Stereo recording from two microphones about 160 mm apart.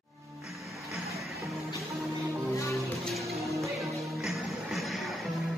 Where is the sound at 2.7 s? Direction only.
Centre (ahead or behind).